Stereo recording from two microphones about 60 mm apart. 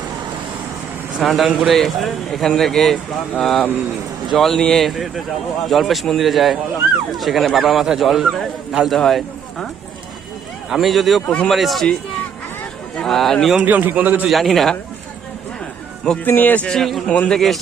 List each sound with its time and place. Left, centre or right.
1.2 s speech: centre
10.7 s speech: centre
11.3 s a man's voice: centre
11.5 s speech: centre
13.1 s speech: centre
13.7 s a man's voice: right
14.3 s speech: centre
16.2 s speech: left
16.6 s a man's voice: centre